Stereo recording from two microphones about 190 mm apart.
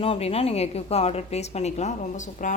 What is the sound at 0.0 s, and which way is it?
A woman's voice, 30° left (ahead or behind).